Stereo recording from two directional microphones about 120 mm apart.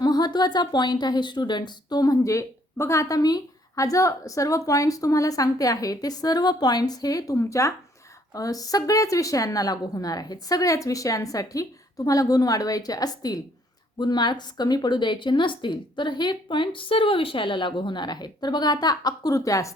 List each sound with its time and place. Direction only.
0.0 s a woman's voice: 35° left (ahead or behind)